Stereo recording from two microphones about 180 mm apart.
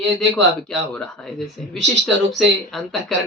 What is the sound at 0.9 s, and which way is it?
Speech, 5° left (ahead or behind).